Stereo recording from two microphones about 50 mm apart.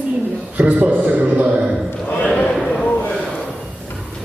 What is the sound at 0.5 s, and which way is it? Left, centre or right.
Mantra, right.